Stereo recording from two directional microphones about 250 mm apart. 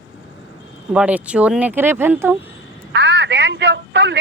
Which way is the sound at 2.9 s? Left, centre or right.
Right.